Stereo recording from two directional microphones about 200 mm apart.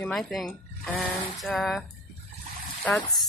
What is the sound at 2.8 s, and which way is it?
Speech, centre (ahead or behind).